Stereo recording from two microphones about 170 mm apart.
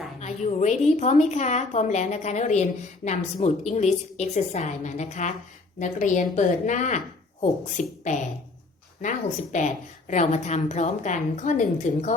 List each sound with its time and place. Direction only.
0.2 s a woman's voice: 40° left (ahead or behind)